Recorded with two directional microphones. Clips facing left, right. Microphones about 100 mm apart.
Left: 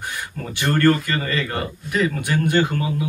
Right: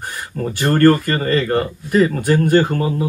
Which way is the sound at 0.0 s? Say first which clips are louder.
Right 5 dB; 45° right (ahead or behind).